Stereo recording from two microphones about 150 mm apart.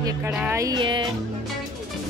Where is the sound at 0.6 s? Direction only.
30° right (ahead or behind).